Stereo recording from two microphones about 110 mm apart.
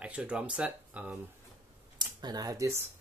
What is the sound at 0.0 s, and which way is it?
Speech, 10° right (ahead or behind).